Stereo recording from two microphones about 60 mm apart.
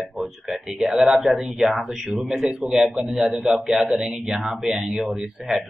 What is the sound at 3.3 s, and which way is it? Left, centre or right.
Speech, right.